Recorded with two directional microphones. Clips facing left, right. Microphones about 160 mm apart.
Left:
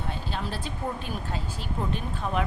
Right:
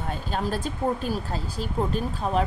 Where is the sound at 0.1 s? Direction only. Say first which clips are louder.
Right 7 dB; 45° right (ahead or behind).